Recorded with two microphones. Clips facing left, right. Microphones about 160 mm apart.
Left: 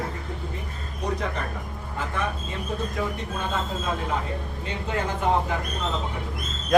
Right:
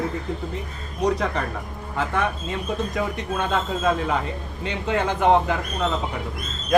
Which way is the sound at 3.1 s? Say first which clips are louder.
Right 5 dB; 80° right.